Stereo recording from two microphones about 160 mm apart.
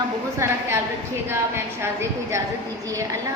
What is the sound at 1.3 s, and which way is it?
Speech, 15° right (ahead or behind).